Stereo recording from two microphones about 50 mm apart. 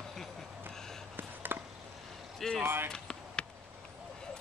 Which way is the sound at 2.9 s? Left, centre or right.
Centre.